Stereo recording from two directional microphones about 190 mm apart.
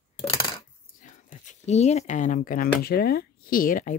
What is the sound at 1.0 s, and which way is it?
Speech, 40° left (ahead or behind).